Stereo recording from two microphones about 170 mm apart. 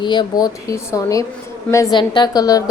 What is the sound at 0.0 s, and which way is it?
Speech, 25° left (ahead or behind).